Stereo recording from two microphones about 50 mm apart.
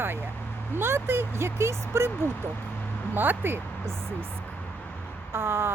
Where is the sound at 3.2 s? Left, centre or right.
Right.